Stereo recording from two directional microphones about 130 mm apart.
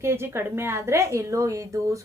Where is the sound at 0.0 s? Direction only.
20° right (ahead or behind).